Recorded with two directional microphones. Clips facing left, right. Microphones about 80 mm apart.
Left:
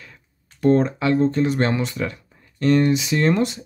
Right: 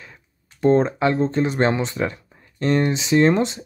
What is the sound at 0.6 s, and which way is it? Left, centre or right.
Speech, right.